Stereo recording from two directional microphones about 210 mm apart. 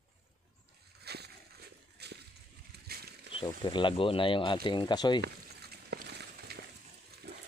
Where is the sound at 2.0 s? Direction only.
50° right (ahead or behind).